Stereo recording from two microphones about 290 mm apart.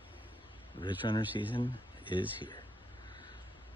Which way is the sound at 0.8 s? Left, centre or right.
Centre.